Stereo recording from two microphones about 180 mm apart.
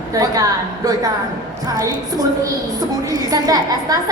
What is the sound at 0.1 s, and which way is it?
Speech, 20° right (ahead or behind).